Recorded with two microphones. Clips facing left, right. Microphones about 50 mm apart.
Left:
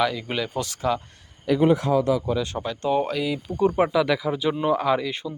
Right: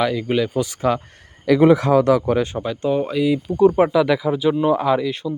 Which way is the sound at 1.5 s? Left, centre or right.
Right.